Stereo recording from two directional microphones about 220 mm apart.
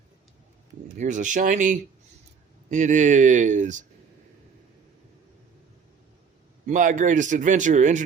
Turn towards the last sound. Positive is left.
turn(degrees=-35)  # may be behind; listen again after turning